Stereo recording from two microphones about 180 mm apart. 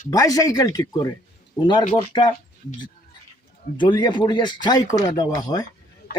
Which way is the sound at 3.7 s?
25° left (ahead or behind).